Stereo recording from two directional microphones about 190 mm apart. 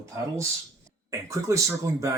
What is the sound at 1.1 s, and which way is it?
Speech, 15° right (ahead or behind).